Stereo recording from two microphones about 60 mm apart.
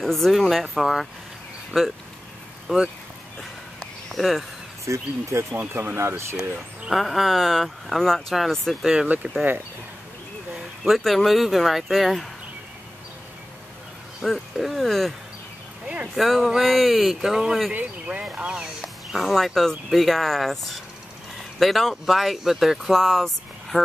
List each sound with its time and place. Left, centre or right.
0.0 s speech: centre
3.8 s a sound: centre
4.8 s speech: right
5.5 s speech: right
5.9 s speech: right
6.9 s speech: centre
9.0 s speech: right
10.8 s speech: centre
14.2 s speech: centre
16.2 s speech: centre
17.7 s speech: right
18.4 s speech: centre
19.1 s speech: centre